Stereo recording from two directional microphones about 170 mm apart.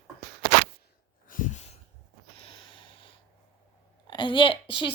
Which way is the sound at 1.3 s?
45° left (ahead or behind).